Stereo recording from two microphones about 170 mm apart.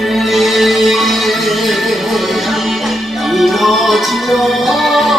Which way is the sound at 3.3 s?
Centre (ahead or behind).